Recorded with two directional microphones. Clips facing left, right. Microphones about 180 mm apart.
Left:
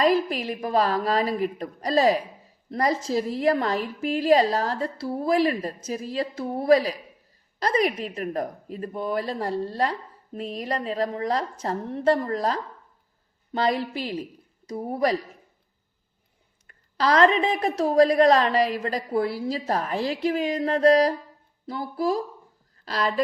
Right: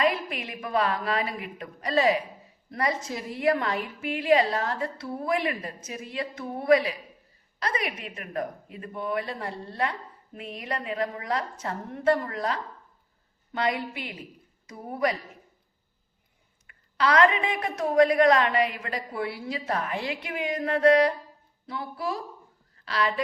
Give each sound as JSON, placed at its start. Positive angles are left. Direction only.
{"t": 0.0, "sound": "a woman's voice", "side_deg": 35}
{"t": 16.6, "sound": "a woman's voice", "side_deg": 35}